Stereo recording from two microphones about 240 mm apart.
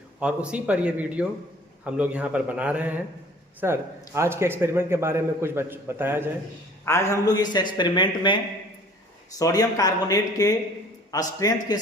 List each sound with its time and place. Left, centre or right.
0.2 s a man's voice: centre
6.8 s speech: centre
9.4 s speech: centre